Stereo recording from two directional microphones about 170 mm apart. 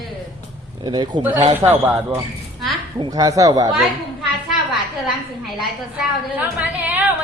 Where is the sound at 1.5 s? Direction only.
10° right (ahead or behind).